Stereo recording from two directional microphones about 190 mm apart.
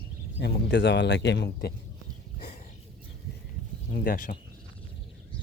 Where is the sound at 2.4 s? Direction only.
50° left (ahead or behind).